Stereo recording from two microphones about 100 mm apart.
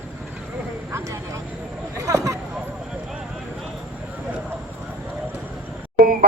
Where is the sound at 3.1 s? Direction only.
5° right (ahead or behind).